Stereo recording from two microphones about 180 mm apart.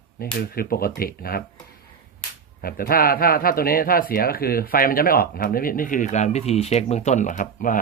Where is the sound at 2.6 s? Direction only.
55° left (ahead or behind).